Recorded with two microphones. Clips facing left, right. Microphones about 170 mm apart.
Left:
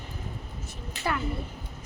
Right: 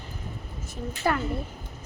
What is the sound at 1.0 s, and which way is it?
Speech, 45° right (ahead or behind).